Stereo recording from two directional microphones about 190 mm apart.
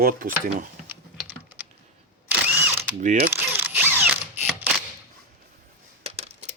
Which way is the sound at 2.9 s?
40° right (ahead or behind).